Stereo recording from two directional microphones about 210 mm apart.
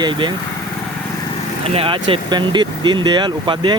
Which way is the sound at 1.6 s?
25° right (ahead or behind).